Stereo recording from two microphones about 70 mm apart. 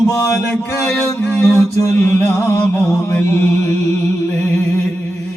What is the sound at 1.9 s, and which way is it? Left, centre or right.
Speech, left.